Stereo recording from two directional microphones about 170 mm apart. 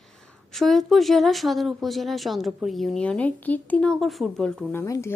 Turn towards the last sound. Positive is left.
turn(degrees=20)  # may be behind; listen again after turning